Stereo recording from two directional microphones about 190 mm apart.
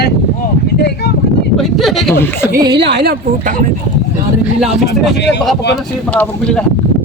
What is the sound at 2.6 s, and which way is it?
Speech, 60° right (ahead or behind).